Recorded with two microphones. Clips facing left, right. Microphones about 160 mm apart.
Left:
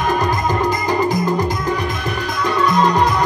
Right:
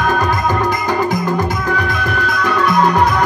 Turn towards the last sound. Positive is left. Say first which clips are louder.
# right 2 dB
turn(degrees=25)  # may be behind; listen again after turning